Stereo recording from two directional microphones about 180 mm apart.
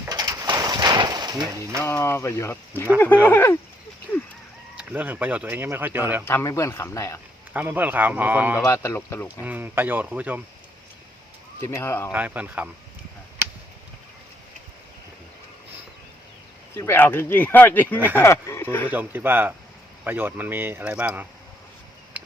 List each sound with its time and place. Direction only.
0.0 s a sound: 20° right (ahead or behind)
1.8 s speech: 15° left (ahead or behind)
4.8 s speech: 10° right (ahead or behind)
6.2 s speech: 15° left (ahead or behind)
7.5 s speech: 10° right (ahead or behind)
8.5 s speech: 15° left (ahead or behind)
9.4 s speech: 10° right (ahead or behind)
11.6 s speech: 15° left (ahead or behind)
12.1 s speech: 10° right (ahead or behind)
16.7 s speech: 15° left (ahead or behind)
18.9 s speech: 10° right (ahead or behind)